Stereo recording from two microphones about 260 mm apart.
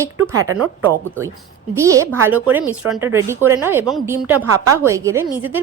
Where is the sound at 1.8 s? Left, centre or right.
Centre.